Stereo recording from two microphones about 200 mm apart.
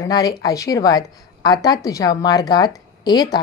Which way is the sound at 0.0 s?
20° left (ahead or behind).